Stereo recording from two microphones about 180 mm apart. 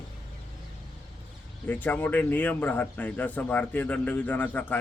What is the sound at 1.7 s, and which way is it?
Speech, 10° left (ahead or behind).